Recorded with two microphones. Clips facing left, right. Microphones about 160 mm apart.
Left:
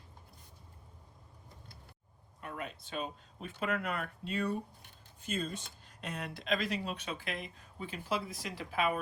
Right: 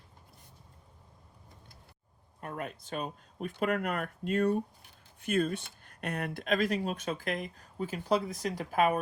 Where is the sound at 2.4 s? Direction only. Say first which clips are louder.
Right 4 dB; 50° right (ahead or behind).